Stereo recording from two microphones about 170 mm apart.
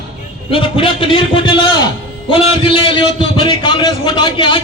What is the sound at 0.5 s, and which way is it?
A man's voice, 30° left (ahead or behind).